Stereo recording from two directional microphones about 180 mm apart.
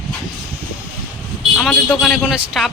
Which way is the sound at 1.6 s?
5° left (ahead or behind).